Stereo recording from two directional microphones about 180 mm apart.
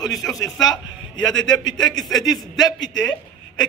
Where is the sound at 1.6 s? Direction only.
25° left (ahead or behind).